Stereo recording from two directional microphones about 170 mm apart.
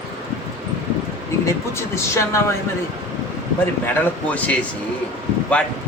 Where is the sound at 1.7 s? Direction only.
15° left (ahead or behind).